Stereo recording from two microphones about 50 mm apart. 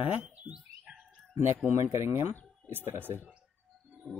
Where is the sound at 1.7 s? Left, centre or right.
Right.